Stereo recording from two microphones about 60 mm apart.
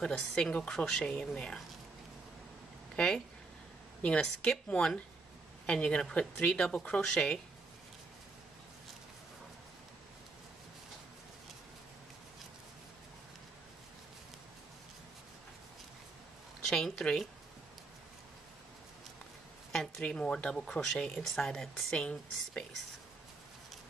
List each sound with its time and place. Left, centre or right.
0.0 s speech: centre
4.0 s speech: centre
16.6 s speech: centre
19.7 s speech: centre